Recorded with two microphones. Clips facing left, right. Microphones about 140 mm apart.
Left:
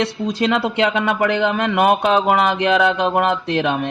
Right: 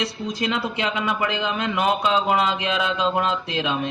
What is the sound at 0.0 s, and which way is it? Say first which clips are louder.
A man's voice: left 6 dB; 65° left (ahead or behind).